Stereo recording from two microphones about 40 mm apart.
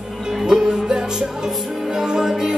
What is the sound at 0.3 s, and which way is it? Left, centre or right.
Music, centre.